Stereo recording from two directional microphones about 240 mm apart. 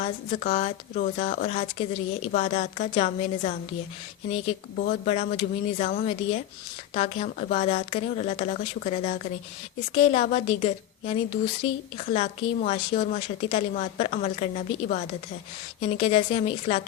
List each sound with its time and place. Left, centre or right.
0.0 s speech: left